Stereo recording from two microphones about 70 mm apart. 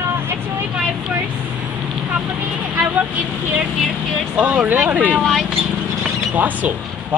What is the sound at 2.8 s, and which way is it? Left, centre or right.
Speech, right.